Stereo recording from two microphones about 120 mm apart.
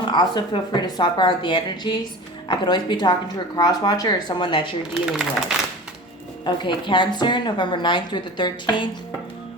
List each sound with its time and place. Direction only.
0.1 s a woman's voice: 40° left (ahead or behind)
4.9 s a man's voice: 5° right (ahead or behind)
6.4 s a woman's voice: 40° left (ahead or behind)